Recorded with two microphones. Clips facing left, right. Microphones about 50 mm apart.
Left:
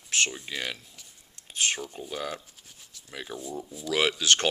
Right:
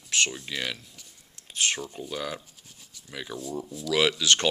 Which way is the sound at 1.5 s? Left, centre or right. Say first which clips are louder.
Right 1 dB; centre.